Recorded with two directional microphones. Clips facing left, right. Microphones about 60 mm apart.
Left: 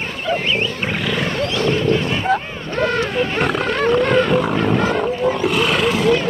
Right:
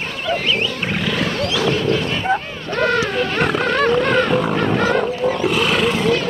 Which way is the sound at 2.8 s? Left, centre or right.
Right.